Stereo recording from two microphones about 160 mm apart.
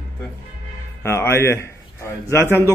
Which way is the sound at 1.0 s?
15° left (ahead or behind).